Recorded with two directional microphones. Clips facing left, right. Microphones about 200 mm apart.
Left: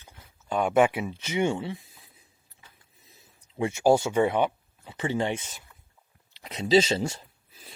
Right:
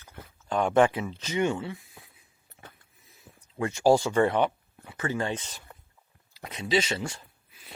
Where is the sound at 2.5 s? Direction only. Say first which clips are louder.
Right 10 dB; 60° right (ahead or behind).